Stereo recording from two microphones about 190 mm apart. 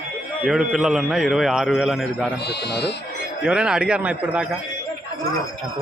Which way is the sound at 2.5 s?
60° left (ahead or behind).